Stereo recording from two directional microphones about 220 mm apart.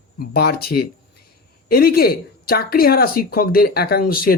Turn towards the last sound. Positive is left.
turn(degrees=40)  # may be behind; listen again after turning